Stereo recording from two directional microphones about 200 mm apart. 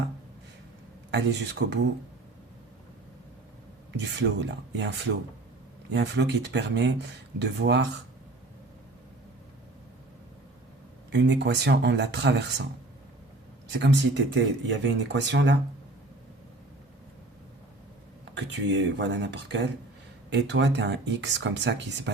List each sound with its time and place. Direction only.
1.1 s speech: 60° right (ahead or behind)
3.9 s speech: 60° right (ahead or behind)
11.1 s speech: 60° right (ahead or behind)
13.7 s speech: 60° right (ahead or behind)
18.3 s speech: 60° right (ahead or behind)